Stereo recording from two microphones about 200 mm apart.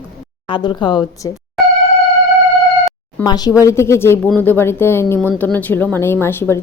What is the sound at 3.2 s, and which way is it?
Speech, 20° left (ahead or behind).